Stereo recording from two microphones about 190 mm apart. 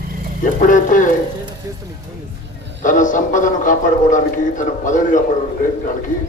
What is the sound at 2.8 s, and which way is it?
A man's voice, 45° left (ahead or behind).